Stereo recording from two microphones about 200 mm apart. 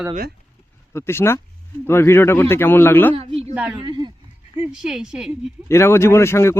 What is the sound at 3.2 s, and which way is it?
Speech, 30° right (ahead or behind).